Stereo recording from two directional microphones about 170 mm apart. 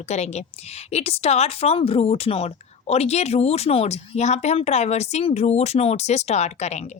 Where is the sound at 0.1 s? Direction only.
40° left (ahead or behind).